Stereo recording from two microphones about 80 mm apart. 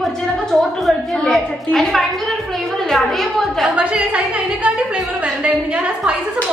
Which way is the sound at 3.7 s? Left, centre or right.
Centre.